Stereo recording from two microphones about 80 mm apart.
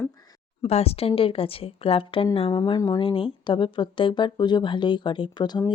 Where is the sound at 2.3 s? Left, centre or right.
Left.